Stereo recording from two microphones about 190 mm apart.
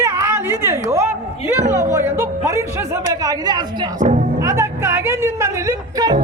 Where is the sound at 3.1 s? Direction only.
20° right (ahead or behind).